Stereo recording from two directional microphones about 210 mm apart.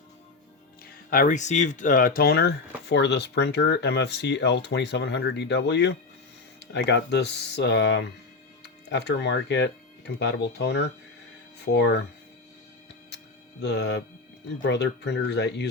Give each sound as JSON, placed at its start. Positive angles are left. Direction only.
{"t": 1.1, "sound": "speech", "side_deg": 40}
{"t": 13.6, "sound": "speech", "side_deg": 55}